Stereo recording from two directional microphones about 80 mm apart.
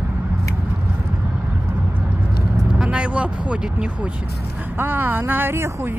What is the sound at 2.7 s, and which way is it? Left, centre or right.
Speech, centre.